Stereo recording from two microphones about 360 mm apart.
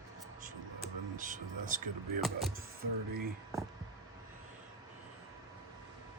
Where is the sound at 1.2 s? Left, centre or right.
Right.